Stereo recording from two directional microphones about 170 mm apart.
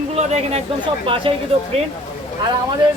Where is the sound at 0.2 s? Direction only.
40° right (ahead or behind).